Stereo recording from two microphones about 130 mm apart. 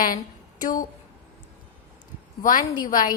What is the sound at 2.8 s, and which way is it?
Speech, 90° left.